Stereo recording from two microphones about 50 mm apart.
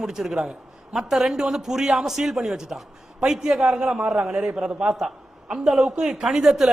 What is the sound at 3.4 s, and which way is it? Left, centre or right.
A man's voice, centre.